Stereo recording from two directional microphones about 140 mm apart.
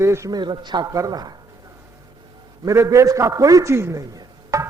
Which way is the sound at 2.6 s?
20° right (ahead or behind).